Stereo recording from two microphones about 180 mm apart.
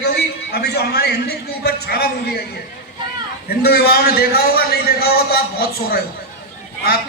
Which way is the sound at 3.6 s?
60° left (ahead or behind).